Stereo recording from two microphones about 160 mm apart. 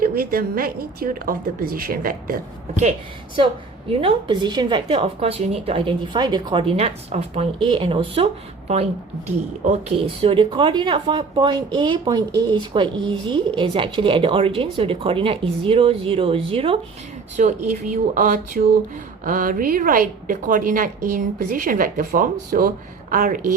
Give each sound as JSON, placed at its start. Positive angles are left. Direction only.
{"t": 0.0, "sound": "a woman's voice", "side_deg": -70}
{"t": 3.3, "sound": "speech", "side_deg": -35}
{"t": 17.3, "sound": "a woman's voice", "side_deg": -50}